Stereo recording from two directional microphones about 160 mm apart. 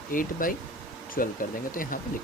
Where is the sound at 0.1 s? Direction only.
60° left (ahead or behind).